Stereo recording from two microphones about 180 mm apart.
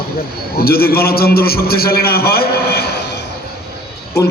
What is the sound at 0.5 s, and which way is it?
A man's voice, 60° left (ahead or behind).